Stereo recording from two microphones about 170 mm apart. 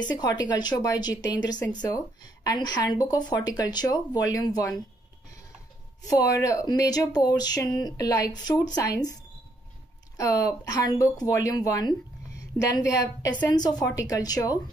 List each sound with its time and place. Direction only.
0.0 s a woman's voice: 25° left (ahead or behind)
6.0 s a woman's voice: 20° left (ahead or behind)
10.1 s a woman's voice: 20° left (ahead or behind)